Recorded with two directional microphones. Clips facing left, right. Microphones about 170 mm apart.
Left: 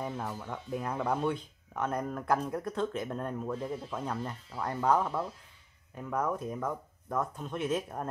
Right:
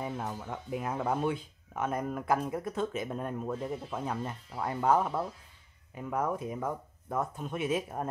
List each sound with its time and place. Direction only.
0.2 s speech: 10° right (ahead or behind)